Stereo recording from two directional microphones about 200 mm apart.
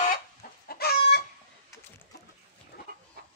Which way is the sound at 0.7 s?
50° left (ahead or behind).